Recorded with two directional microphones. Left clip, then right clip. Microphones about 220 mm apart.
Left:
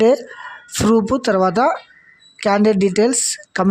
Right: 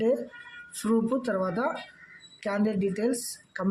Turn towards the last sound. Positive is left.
turn(degrees=45)  # may be behind; listen again after turning